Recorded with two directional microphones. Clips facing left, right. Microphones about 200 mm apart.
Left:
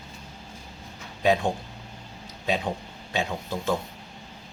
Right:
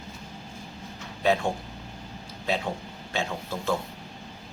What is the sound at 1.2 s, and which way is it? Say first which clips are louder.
Speech: left 2 dB; 15° left (ahead or behind).